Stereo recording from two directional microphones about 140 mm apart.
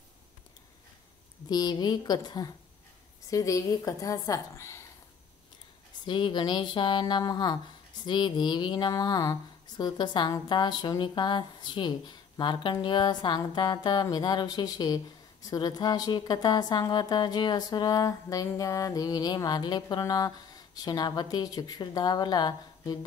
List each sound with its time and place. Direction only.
1.5 s a woman's voice: 30° left (ahead or behind)
6.0 s a woman's voice: 35° left (ahead or behind)